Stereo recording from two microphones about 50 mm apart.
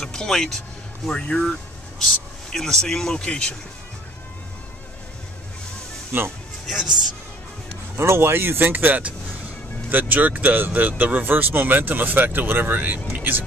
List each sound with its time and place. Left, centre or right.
0.0 s speech: centre
2.0 s speech: centre
6.1 s speech: right
6.7 s speech: centre
8.0 s speech: right